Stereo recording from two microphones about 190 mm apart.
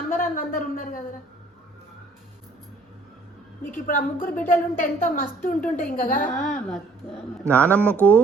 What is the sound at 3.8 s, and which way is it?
A woman's voice, 45° left (ahead or behind).